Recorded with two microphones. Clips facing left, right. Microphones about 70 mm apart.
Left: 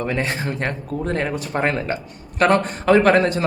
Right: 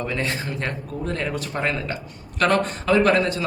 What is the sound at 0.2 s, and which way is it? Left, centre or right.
A man's voice, left.